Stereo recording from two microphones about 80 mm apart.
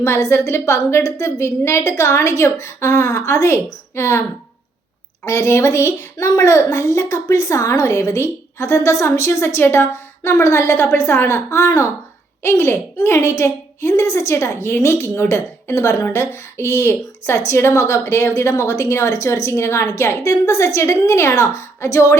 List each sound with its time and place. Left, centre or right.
0.0 s a woman's voice: left
5.2 s a woman's voice: left